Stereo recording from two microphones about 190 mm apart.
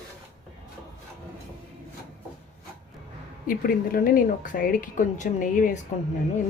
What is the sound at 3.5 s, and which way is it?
Speech, 50° left (ahead or behind).